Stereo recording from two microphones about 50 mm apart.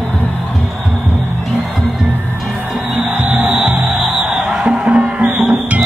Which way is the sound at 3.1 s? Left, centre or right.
Right.